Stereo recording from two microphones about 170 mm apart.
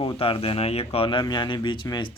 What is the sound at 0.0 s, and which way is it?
Speech, 30° left (ahead or behind).